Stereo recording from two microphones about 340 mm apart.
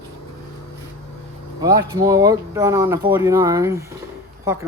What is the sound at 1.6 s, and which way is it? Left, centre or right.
Speech, centre.